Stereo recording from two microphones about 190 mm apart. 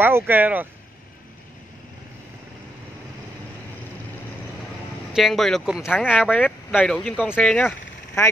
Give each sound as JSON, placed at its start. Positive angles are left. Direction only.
{"t": 0.0, "sound": "speech", "side_deg": -10}
{"t": 5.1, "sound": "speech", "side_deg": 0}